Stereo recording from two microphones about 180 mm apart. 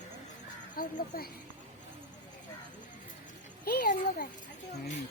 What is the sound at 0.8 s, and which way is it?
Speech, 55° left (ahead or behind).